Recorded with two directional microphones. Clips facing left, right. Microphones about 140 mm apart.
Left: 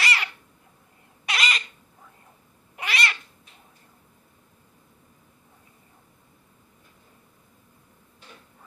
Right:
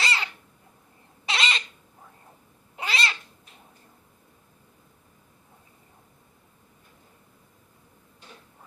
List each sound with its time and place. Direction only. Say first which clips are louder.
0.0 s a sound: left 1 dB; 25° right (ahead or behind)
1.3 s bird: even; 25° right (ahead or behind)
2.7 s cat: left 1 dB; 25° right (ahead or behind)